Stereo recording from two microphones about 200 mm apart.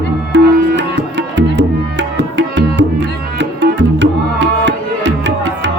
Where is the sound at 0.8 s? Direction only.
60° right (ahead or behind).